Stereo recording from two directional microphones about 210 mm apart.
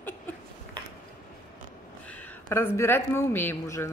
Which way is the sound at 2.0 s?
5° left (ahead or behind).